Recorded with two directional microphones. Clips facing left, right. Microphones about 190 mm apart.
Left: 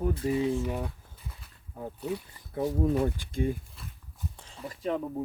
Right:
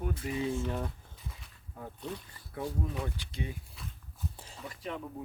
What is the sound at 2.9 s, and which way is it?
Speech, 50° left (ahead or behind).